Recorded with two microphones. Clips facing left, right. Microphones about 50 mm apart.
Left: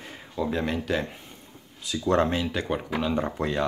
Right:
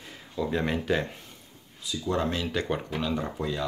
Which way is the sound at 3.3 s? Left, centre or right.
Left.